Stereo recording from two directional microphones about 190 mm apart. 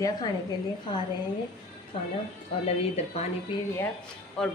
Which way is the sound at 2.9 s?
35° left (ahead or behind).